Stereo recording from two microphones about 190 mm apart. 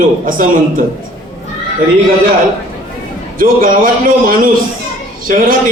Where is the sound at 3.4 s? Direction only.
50° right (ahead or behind).